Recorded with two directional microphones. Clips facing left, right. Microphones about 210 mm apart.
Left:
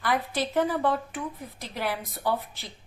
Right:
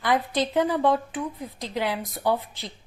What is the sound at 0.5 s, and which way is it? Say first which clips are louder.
Speech: right 3 dB; 15° right (ahead or behind).